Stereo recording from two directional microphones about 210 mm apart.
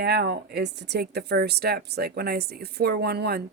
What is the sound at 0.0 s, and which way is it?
Speech, 50° right (ahead or behind).